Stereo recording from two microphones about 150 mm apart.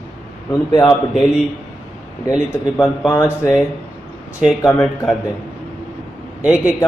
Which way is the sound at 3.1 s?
20° left (ahead or behind).